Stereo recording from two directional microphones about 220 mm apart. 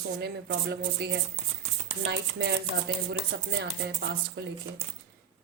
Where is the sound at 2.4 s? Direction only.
45° right (ahead or behind).